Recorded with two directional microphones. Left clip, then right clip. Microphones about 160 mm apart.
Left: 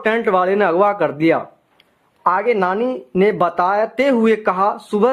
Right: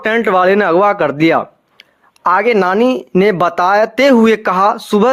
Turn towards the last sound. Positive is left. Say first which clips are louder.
# right 5 dB
turn(degrees=-35)  # may be behind; listen again after turning